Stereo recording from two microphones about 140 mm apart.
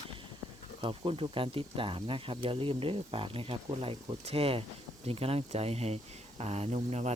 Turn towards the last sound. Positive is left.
turn(degrees=-55)  # may be behind; listen again after turning